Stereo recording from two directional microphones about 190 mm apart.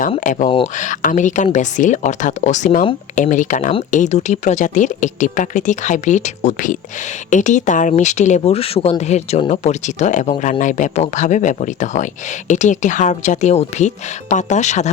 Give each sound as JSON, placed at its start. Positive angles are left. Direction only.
{"t": 0.2, "sound": "speech", "side_deg": 45}
{"t": 0.4, "sound": "speech", "side_deg": 30}